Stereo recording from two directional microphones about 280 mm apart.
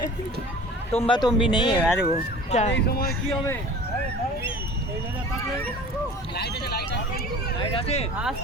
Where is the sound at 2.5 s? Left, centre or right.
Left.